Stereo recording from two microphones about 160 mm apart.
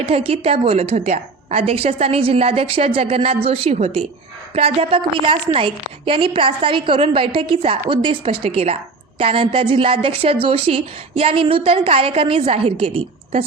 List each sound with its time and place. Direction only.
0.0 s a woman's voice: 35° right (ahead or behind)